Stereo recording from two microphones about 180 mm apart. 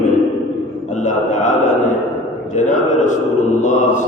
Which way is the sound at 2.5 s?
40° left (ahead or behind).